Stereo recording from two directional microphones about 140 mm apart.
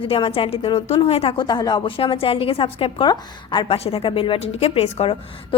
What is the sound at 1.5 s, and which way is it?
A woman's voice, 30° left (ahead or behind).